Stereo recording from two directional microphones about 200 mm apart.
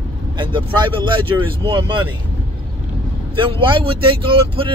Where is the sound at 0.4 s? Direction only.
25° right (ahead or behind).